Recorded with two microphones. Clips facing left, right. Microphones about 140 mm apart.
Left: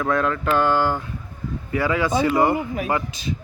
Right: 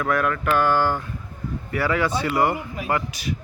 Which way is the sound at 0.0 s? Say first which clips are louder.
Left 1 dB; 25° left (ahead or behind).